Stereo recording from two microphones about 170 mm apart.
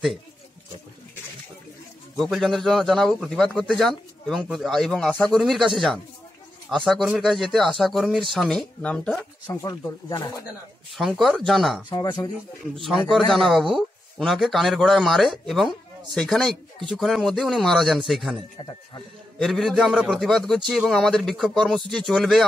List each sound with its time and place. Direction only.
2.1 s a man's voice: centre (ahead or behind)
9.5 s speech: 15° left (ahead or behind)
10.9 s a man's voice: centre (ahead or behind)
11.9 s speech: 20° left (ahead or behind)
12.8 s a man's voice: centre (ahead or behind)
18.6 s speech: 25° left (ahead or behind)
19.3 s a man's voice: centre (ahead or behind)